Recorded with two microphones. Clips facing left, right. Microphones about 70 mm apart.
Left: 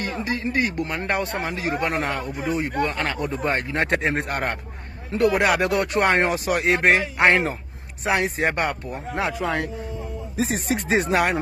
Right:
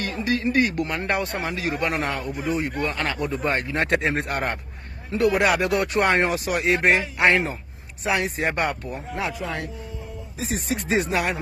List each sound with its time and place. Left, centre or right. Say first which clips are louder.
0.0 s a man's voice: right 2 dB; left